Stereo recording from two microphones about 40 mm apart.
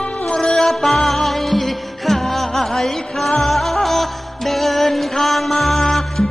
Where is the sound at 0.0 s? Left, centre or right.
Left.